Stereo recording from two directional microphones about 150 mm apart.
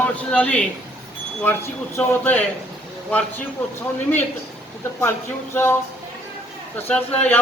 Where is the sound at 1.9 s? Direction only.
15° left (ahead or behind).